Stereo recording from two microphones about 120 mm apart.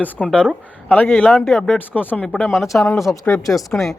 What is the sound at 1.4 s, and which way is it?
Speech, centre (ahead or behind).